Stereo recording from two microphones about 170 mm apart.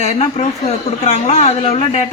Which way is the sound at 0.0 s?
40° left (ahead or behind).